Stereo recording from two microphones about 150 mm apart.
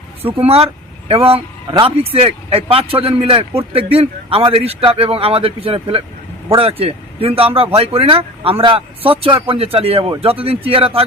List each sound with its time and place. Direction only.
0.2 s speech: 40° right (ahead or behind)